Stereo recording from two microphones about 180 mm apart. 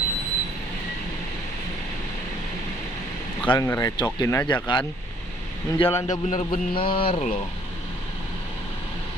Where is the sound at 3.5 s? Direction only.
20° left (ahead or behind).